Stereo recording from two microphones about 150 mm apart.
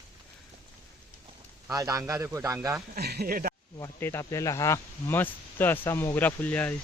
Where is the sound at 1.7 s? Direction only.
20° right (ahead or behind).